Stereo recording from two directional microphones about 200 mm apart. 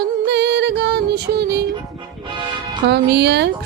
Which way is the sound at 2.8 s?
55° right (ahead or behind).